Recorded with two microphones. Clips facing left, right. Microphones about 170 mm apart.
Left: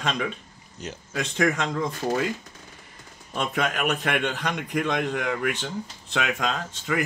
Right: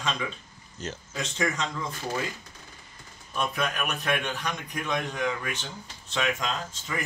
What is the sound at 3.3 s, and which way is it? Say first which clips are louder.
A man's voice: left 3 dB; 80° left.